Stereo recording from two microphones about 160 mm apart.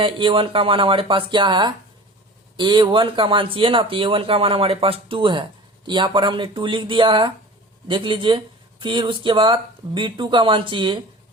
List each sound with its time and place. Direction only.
0.0 s speech: 30° right (ahead or behind)